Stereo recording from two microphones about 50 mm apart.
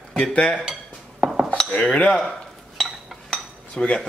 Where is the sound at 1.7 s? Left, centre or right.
Left.